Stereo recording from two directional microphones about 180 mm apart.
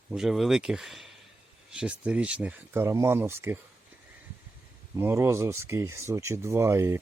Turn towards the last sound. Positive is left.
turn(degrees=-15)  # may be behind; listen again after turning